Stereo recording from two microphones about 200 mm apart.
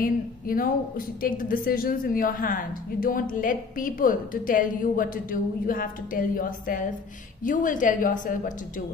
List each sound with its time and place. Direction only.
0.0 s a woman's voice: 45° left (ahead or behind)